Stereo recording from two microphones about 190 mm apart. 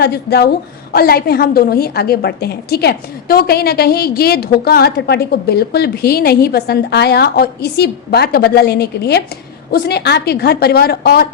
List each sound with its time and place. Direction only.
0.0 s a woman's voice: 55° left (ahead or behind)